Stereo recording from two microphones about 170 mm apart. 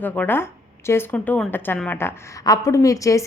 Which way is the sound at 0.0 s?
10° left (ahead or behind).